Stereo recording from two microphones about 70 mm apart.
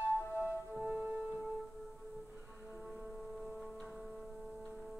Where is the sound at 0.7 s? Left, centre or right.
Centre.